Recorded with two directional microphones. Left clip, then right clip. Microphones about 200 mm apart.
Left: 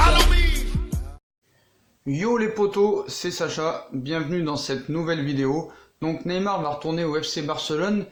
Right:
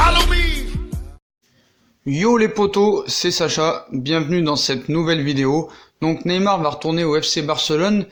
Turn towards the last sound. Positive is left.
turn(degrees=-30)  # may be behind; listen again after turning